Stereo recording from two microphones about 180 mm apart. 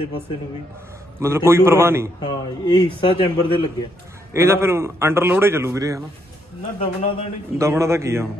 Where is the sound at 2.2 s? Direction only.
25° left (ahead or behind).